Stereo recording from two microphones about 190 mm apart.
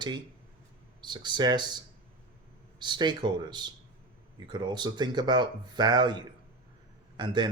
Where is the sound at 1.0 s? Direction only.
25° right (ahead or behind).